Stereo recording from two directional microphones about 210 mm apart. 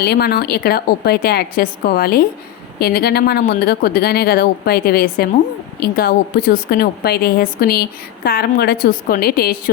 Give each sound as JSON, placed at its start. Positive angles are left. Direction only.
{"t": 0.0, "sound": "a woman's voice", "side_deg": 50}